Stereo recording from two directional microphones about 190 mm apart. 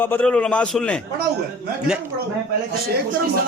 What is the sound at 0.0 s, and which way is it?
A man's voice, 10° left (ahead or behind).